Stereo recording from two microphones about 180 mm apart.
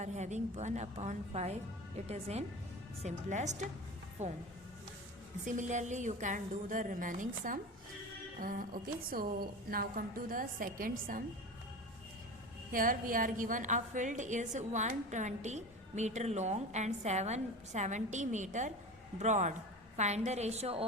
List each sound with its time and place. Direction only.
0.0 s a woman's voice: 40° right (ahead or behind)
5.5 s a woman's voice: 45° right (ahead or behind)
12.7 s a woman's voice: 50° right (ahead or behind); by 20.8 s 35° right (ahead or behind)